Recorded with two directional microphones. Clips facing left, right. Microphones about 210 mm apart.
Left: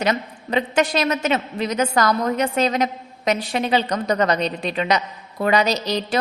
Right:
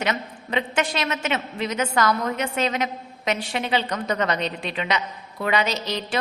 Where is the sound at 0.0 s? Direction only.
40° left (ahead or behind).